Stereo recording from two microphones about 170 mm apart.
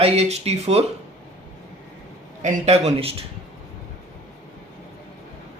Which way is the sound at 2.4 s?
40° right (ahead or behind).